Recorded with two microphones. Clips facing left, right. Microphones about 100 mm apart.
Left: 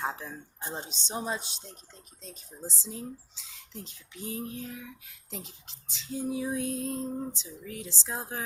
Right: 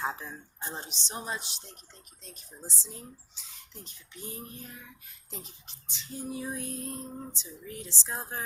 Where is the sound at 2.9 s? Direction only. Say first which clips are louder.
Left 7 dB; 90° left.